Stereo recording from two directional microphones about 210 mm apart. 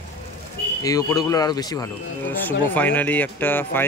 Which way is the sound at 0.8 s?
15° left (ahead or behind).